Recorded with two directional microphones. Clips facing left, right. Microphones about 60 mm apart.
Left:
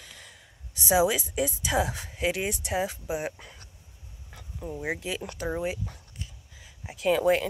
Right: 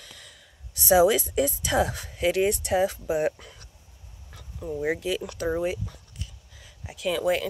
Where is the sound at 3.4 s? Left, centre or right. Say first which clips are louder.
Even; left.